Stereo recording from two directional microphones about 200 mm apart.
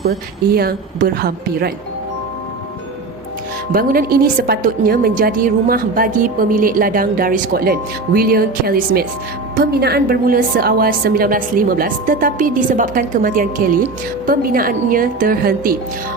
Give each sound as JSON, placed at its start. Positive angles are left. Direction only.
{"t": 0.5, "sound": "a woman's voice", "side_deg": -50}
{"t": 3.7, "sound": "a woman's voice", "side_deg": -45}